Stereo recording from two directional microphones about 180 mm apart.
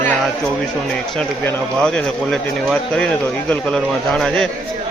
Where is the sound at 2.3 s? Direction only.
Centre (ahead or behind).